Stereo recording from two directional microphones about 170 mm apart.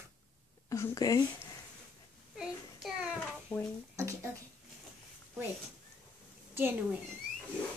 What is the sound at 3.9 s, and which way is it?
Speech, 15° right (ahead or behind).